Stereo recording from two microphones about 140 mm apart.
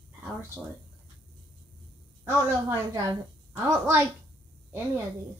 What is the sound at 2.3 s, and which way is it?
A woman's voice, 20° right (ahead or behind).